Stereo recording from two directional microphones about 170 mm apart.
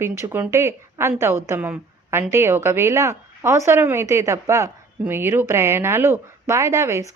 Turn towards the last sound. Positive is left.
turn(degrees=-15)  # may be behind; listen again after turning